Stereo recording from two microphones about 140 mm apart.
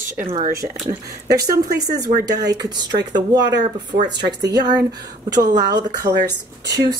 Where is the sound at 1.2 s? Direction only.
25° right (ahead or behind).